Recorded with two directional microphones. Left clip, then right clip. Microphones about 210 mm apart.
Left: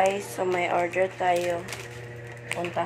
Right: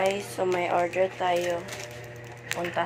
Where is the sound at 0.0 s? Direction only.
Centre (ahead or behind).